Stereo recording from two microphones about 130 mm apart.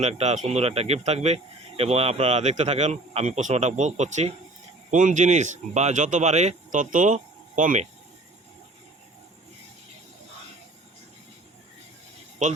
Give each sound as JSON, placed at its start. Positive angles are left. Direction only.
{"t": 0.0, "sound": "speech", "side_deg": -55}
{"t": 4.9, "sound": "a man's voice", "side_deg": -70}